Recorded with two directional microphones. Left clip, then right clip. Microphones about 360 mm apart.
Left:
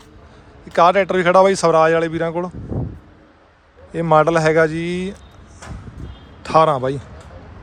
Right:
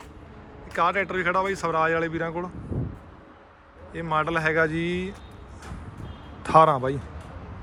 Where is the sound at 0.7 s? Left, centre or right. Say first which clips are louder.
Left 10 dB; centre.